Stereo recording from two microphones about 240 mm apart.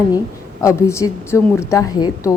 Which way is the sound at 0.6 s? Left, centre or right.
Centre.